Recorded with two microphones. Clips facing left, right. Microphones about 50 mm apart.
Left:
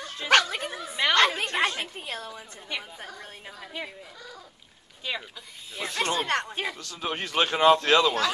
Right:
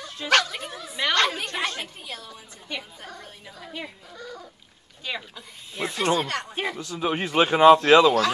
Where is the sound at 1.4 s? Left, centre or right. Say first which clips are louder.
Left 2 dB; left.